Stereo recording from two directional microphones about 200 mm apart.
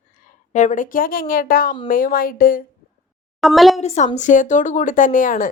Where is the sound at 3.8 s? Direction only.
35° left (ahead or behind).